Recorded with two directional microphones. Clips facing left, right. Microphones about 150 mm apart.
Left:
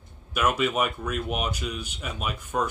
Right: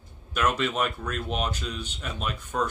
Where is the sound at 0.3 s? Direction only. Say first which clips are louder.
Left 1 dB; 10° left (ahead or behind).